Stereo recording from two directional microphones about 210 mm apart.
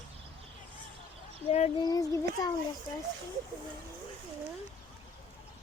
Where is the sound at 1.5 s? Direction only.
30° left (ahead or behind).